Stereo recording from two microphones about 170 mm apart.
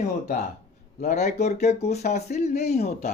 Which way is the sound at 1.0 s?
40° left (ahead or behind).